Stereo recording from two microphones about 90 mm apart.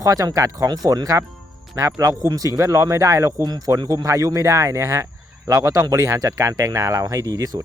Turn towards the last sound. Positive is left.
turn(degrees=-40)  # may be behind; listen again after turning